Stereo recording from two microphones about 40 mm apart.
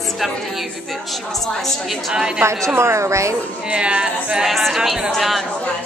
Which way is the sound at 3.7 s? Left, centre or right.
Right.